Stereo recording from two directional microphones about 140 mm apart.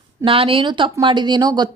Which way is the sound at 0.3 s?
40° right (ahead or behind).